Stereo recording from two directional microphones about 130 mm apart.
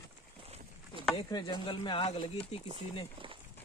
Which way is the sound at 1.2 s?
35° left (ahead or behind).